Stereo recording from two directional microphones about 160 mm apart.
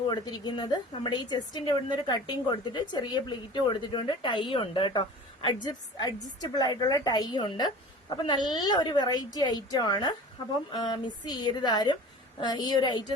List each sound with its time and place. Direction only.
0.1 s speech: 25° left (ahead or behind)